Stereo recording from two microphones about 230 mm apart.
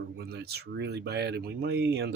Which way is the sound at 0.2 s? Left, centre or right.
Right.